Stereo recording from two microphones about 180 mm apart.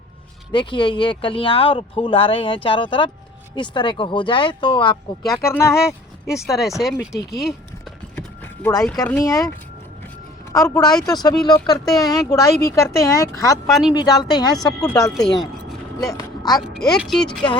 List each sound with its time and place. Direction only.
0.5 s speech: 25° left (ahead or behind)
6.4 s speech: centre (ahead or behind)
8.6 s speech: 15° left (ahead or behind)
10.5 s speech: 20° left (ahead or behind)
13.7 s speech: centre (ahead or behind)
13.9 s speech: 20° left (ahead or behind)
14.8 s speech: 5° left (ahead or behind)
16.0 s speech: 20° left (ahead or behind)
16.7 s speech: centre (ahead or behind)